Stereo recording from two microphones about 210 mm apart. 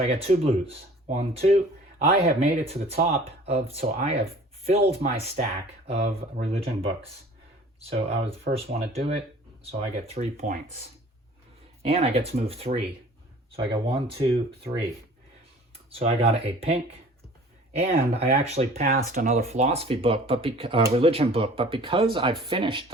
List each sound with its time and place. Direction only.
0.1 s speech: 30° right (ahead or behind)
3.0 s speech: 45° right (ahead or behind)
3.4 s speech: 30° right (ahead or behind)
13.9 s speech: 25° right (ahead or behind)
15.9 s speech: 30° right (ahead or behind)
17.7 s speech: 30° right (ahead or behind)
18.7 s speech: 45° right (ahead or behind); by 22.8 s 25° right (ahead or behind)